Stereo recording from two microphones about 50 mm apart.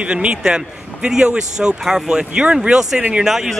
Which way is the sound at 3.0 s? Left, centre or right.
Right.